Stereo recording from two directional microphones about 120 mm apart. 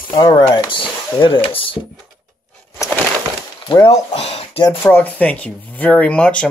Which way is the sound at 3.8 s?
60° left (ahead or behind).